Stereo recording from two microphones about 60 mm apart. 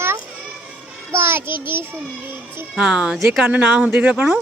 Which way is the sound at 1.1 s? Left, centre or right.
Right.